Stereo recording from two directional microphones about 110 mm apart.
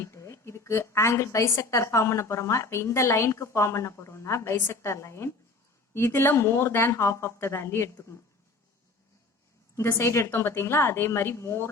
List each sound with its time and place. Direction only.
0.0 s a woman's voice: 25° left (ahead or behind)
9.7 s a woman's voice: 25° left (ahead or behind)